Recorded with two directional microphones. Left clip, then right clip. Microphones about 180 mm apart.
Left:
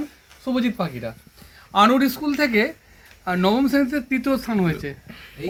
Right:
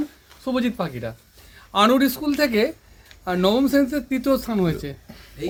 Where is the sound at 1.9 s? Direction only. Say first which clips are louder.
Right 1 dB; 45° right (ahead or behind); by 2.7 s 65° right (ahead or behind).